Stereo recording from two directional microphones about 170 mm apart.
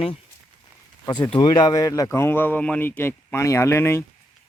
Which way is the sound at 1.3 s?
25° left (ahead or behind).